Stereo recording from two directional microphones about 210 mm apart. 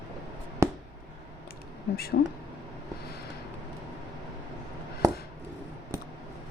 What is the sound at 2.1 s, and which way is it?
Speech, 45° left (ahead or behind).